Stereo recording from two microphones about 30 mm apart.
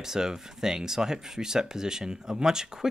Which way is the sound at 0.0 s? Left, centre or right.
Centre.